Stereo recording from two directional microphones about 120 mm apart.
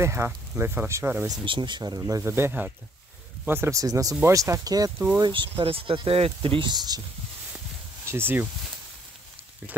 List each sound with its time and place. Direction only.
0.0 s speech: 20° right (ahead or behind)
1.3 s speech: 40° right (ahead or behind)
4.9 s speech: 15° right (ahead or behind)
5.2 s speech: 45° right (ahead or behind)
8.1 s speech: 20° right (ahead or behind)